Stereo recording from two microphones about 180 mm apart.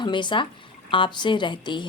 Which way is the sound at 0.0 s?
25° left (ahead or behind).